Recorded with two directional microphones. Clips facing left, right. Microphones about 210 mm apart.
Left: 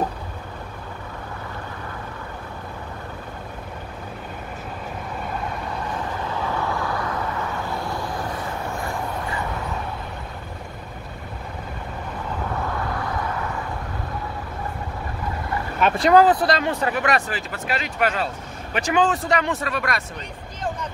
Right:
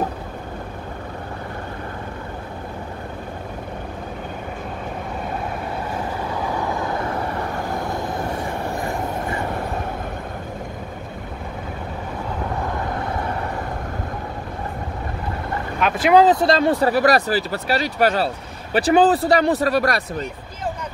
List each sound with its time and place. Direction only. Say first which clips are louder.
6.4 s vehicle: right 1 dB; 15° right (ahead or behind)
13.1 s vehicle: right 2 dB; 30° right (ahead or behind)
15.8 s vehicle: left 1 dB; centre (ahead or behind)
16.1 s speech: right 2 dB; 20° right (ahead or behind); by 20.0 s 35° right (ahead or behind)